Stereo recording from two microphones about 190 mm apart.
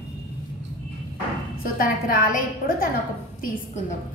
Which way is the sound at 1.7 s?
50° left (ahead or behind).